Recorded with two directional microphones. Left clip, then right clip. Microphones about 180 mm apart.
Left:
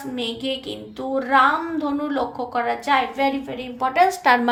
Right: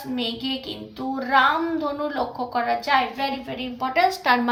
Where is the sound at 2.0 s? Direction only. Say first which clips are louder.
Left 1 dB; 40° left (ahead or behind).